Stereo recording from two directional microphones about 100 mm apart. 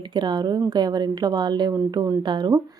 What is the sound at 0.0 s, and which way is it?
A woman's voice, 50° right (ahead or behind).